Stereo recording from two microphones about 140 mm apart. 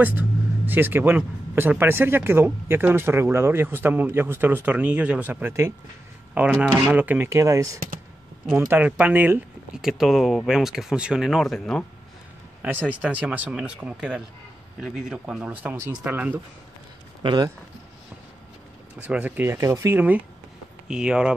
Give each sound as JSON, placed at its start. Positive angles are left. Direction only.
{"t": 0.0, "sound": "speech", "side_deg": -10}
{"t": 8.5, "sound": "speech", "side_deg": -15}
{"t": 9.8, "sound": "speech", "side_deg": 0}
{"t": 12.6, "sound": "speech", "side_deg": -10}
{"t": 17.2, "sound": "speech", "side_deg": -30}
{"t": 19.0, "sound": "speech", "side_deg": -10}